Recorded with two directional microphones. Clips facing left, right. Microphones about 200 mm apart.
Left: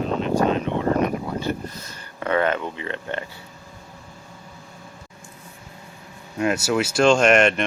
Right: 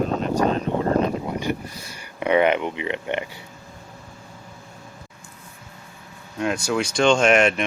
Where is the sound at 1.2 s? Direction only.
15° right (ahead or behind).